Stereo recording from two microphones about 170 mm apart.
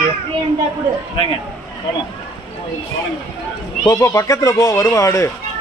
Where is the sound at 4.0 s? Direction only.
15° left (ahead or behind).